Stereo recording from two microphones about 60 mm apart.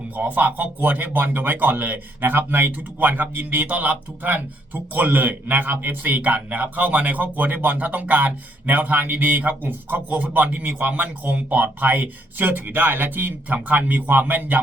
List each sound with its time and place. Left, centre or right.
0.1 s speech: right